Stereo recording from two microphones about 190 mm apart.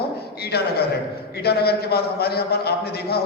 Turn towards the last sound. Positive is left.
turn(degrees=55)  # may be behind; listen again after turning